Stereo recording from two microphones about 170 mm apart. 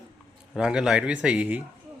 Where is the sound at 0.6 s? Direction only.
5° right (ahead or behind).